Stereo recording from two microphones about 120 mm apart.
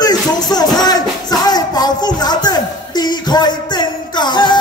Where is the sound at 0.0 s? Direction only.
35° left (ahead or behind).